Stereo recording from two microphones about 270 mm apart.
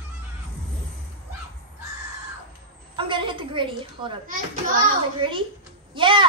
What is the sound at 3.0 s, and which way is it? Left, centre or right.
A woman's voice, centre.